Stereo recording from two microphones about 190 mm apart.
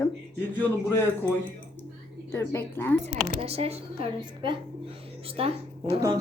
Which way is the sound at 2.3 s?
15° left (ahead or behind).